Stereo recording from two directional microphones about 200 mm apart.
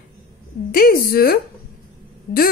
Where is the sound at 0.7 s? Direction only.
50° left (ahead or behind).